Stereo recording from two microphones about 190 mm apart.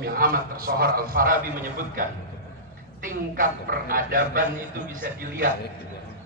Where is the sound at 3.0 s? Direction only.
45° right (ahead or behind).